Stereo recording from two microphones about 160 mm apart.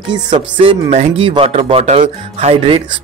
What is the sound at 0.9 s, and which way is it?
Speech, 45° right (ahead or behind).